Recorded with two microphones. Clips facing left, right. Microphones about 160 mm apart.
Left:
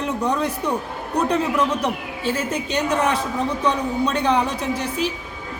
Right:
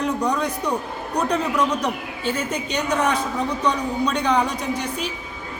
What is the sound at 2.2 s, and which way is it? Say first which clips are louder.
Speech: left 1 dB; 5° left (ahead or behind).